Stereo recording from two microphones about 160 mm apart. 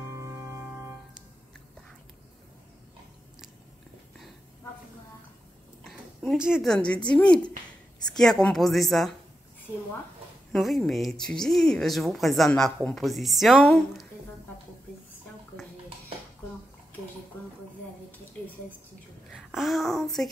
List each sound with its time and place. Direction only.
0.0 s organ: 15° right (ahead or behind)
5.9 s a woman's voice: centre (ahead or behind)
10.5 s a woman's voice: centre (ahead or behind)
19.3 s a woman's voice: centre (ahead or behind)